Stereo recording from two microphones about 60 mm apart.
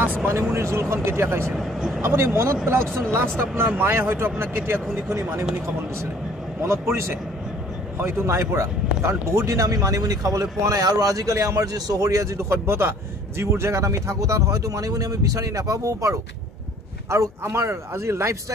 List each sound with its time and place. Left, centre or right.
0.0 s speech: right
0.3 s speech: right
1.6 s speech: centre
2.0 s speech: right
6.6 s speech: right
17.1 s speech: right